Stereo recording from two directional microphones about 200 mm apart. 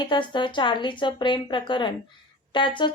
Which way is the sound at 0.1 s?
25° left (ahead or behind).